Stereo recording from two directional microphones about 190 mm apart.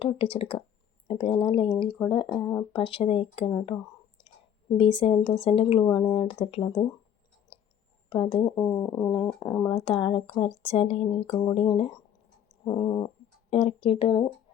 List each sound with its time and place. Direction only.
0.0 s speech: 30° left (ahead or behind)
4.8 s speech: 25° left (ahead or behind)
7.5 s clicking: 30° left (ahead or behind)
8.1 s speech: 25° left (ahead or behind)
11.3 s speech: 20° left (ahead or behind)